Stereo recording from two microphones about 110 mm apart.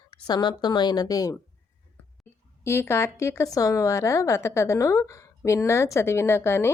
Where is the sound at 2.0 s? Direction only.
15° left (ahead or behind).